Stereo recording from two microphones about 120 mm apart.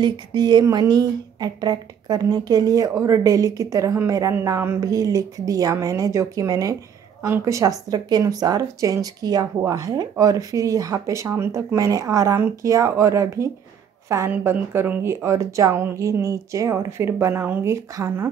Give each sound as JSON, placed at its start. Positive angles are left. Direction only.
{"t": 0.0, "sound": "speech", "side_deg": -35}